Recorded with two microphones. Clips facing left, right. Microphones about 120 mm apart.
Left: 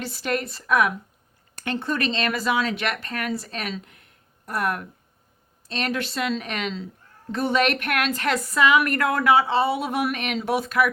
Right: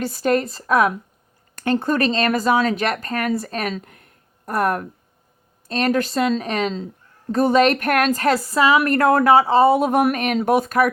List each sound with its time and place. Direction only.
0.0 s a woman's voice: 45° right (ahead or behind)